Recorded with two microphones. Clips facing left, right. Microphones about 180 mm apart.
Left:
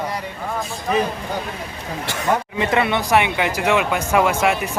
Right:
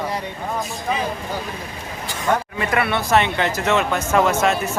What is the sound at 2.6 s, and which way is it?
Speech, 20° left (ahead or behind).